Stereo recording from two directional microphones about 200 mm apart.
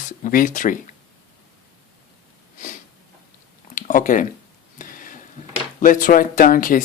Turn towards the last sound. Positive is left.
turn(degrees=45)  # may be behind; listen again after turning